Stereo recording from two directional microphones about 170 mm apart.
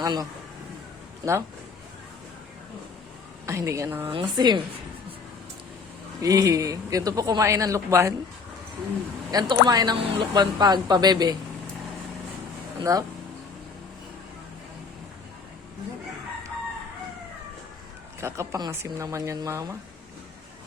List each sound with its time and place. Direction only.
0.0 s speech: 25° right (ahead or behind)
3.4 s speech: 15° right (ahead or behind)
4.1 s speech: 30° right (ahead or behind)
6.2 s speech: 20° right (ahead or behind)
9.3 s speech: 25° right (ahead or behind)
12.8 s speech: 20° right (ahead or behind)
18.2 s speech: 15° right (ahead or behind)